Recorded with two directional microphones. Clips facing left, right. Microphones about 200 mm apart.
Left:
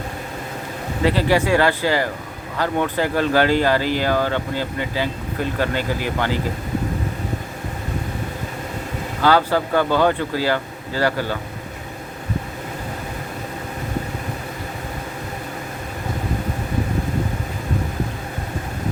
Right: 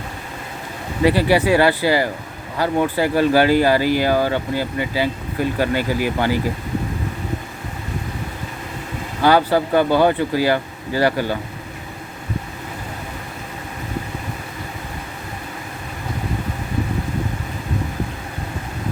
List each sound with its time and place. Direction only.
1.0 s speech: 10° right (ahead or behind)
9.2 s speech: 15° right (ahead or behind)